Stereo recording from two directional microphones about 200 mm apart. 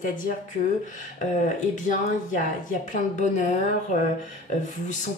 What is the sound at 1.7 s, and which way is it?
A woman's voice, 40° left (ahead or behind).